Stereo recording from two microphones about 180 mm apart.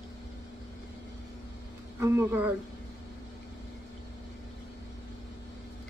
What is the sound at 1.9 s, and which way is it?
Speech, 15° right (ahead or behind).